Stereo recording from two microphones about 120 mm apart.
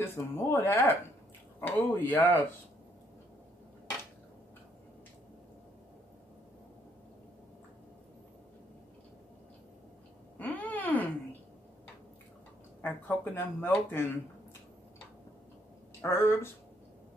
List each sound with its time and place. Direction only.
0.0 s speech: 20° left (ahead or behind)
10.4 s a sound: 15° left (ahead or behind)
12.8 s speech: 15° left (ahead or behind)
16.0 s speech: 20° left (ahead or behind)